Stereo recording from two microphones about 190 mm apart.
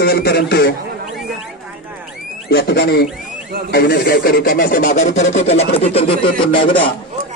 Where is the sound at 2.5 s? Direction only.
55° left (ahead or behind); by 6.9 s 25° left (ahead or behind).